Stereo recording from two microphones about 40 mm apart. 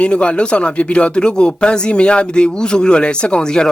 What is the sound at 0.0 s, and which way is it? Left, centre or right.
Speech, left.